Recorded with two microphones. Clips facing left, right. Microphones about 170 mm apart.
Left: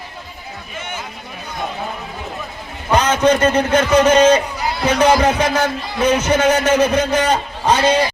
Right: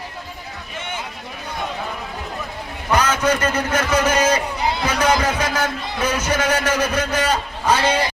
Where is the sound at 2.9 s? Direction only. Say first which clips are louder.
Left 4 dB; 30° left (ahead or behind).